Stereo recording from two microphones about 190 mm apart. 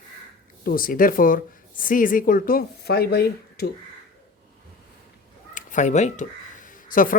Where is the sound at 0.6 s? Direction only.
50° left (ahead or behind).